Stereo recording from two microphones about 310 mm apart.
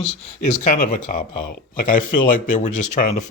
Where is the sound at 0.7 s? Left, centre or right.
Left.